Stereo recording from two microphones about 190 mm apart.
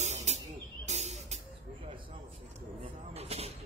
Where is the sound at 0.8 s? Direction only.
35° right (ahead or behind).